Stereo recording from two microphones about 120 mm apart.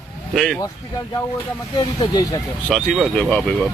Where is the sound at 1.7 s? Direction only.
40° left (ahead or behind).